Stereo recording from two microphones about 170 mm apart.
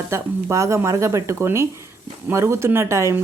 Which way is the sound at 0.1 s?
15° right (ahead or behind).